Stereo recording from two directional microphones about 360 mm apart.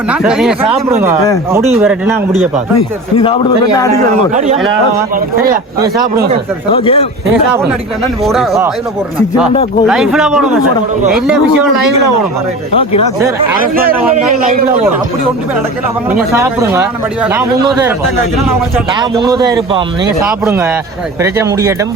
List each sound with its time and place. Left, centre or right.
0.1 s a man's voice: centre
3.2 s a man's voice: centre
6.7 s a man's voice: centre
8.2 s a man's voice: centre
9.8 s a man's voice: centre
13.1 s a man's voice: centre
13.6 s speech: right
16.1 s a man's voice: centre
18.9 s a man's voice: centre